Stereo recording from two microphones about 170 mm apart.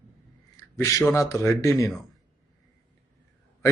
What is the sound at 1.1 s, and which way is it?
Speech, 15° left (ahead or behind).